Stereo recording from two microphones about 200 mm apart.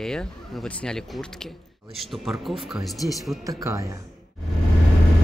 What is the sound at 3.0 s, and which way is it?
Speech, 15° left (ahead or behind).